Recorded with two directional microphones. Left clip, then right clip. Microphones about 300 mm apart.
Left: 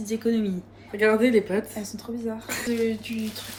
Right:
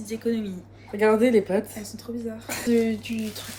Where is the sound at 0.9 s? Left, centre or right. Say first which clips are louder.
Right 1 dB; right.